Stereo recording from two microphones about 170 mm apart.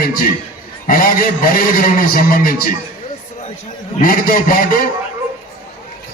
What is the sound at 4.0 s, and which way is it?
Speech, 55° left (ahead or behind).